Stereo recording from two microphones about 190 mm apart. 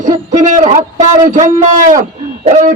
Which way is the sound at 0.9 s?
40° right (ahead or behind).